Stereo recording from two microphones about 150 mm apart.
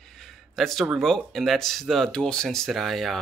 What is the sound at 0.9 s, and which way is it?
Speech, centre (ahead or behind).